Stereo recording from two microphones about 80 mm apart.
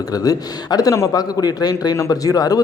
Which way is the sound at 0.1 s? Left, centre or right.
Left.